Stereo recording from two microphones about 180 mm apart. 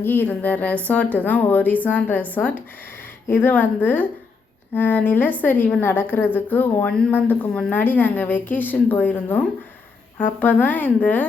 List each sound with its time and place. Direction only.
0.0 s a woman's voice: 10° left (ahead or behind)